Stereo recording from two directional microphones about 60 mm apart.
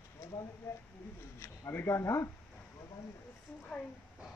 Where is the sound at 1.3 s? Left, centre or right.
Left.